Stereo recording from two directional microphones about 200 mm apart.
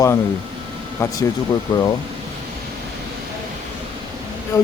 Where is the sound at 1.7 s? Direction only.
20° left (ahead or behind).